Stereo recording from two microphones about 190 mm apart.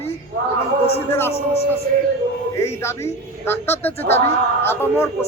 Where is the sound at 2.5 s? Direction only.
15° left (ahead or behind).